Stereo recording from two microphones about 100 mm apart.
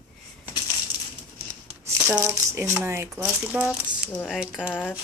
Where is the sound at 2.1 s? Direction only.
20° right (ahead or behind).